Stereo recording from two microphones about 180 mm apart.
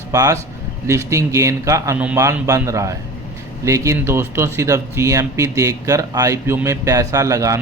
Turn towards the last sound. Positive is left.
turn(degrees=-20)  # may be behind; listen again after turning